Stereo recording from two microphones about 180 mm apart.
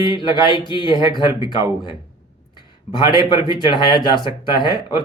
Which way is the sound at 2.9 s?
25° left (ahead or behind).